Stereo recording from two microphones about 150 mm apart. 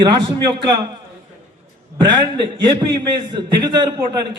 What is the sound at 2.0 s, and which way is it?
A man's voice, 30° right (ahead or behind).